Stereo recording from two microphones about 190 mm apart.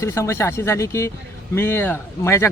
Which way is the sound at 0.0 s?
15° left (ahead or behind).